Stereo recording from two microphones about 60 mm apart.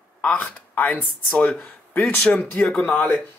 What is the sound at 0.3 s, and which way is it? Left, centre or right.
Speech, left.